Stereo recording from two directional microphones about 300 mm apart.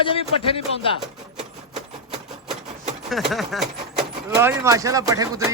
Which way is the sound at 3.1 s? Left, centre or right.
Centre.